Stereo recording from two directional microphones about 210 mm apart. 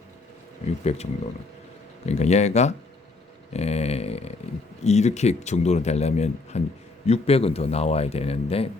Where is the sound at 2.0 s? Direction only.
30° left (ahead or behind).